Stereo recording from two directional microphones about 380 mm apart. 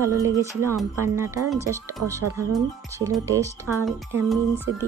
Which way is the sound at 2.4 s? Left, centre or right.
Centre.